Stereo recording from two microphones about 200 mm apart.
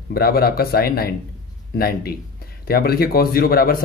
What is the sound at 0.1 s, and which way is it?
Speech, 50° left (ahead or behind).